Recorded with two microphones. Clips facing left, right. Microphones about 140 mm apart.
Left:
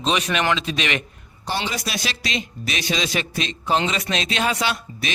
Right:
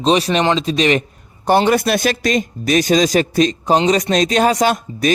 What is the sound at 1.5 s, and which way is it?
A man's voice, 55° right (ahead or behind).